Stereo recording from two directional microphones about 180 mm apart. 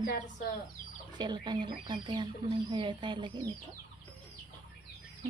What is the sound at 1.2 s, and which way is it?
Speech, 25° right (ahead or behind).